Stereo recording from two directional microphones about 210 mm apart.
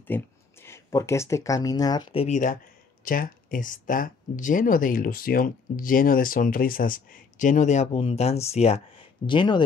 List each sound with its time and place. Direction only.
0.0 s speech: 10° left (ahead or behind)